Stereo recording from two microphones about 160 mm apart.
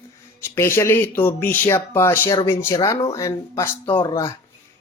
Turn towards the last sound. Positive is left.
turn(degrees=20)  # may be behind; listen again after turning